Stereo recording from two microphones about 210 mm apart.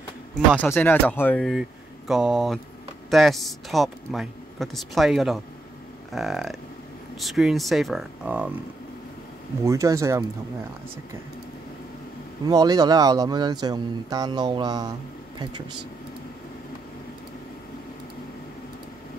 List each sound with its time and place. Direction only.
0.6 s speech: 10° left (ahead or behind)
9.6 s speech: 15° right (ahead or behind)
12.4 s speech: 20° right (ahead or behind)